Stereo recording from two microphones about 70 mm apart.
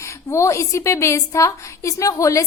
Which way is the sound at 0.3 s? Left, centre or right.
Left.